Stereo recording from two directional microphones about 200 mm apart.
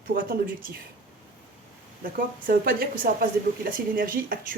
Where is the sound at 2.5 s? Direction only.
45° right (ahead or behind).